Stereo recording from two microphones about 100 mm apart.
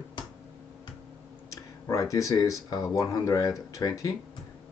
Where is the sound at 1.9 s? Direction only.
35° left (ahead or behind).